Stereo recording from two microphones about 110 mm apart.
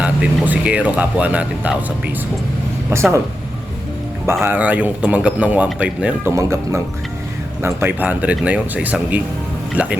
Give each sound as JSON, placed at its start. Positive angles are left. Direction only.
{"t": 0.0, "sound": "speech", "side_deg": -10}
{"t": 2.9, "sound": "speech", "side_deg": -25}
{"t": 4.4, "sound": "speech", "side_deg": -15}
{"t": 6.2, "sound": "speech", "side_deg": -25}